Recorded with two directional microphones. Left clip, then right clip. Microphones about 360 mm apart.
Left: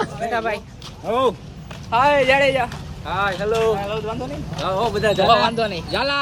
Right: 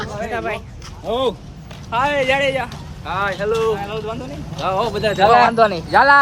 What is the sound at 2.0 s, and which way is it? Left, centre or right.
Speech, centre.